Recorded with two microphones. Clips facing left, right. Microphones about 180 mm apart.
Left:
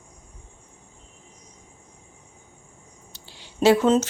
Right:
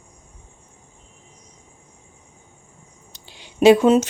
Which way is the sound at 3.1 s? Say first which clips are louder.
Right 3 dB; 15° right (ahead or behind).